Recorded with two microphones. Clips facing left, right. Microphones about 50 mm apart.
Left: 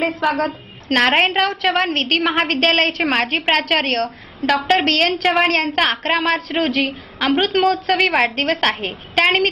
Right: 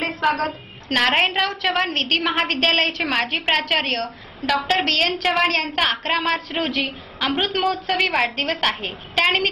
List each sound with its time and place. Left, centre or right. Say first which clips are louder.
0.8 s a woman's voice: left 3 dB; left